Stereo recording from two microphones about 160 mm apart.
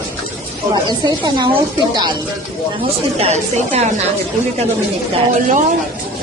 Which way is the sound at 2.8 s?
40° right (ahead or behind).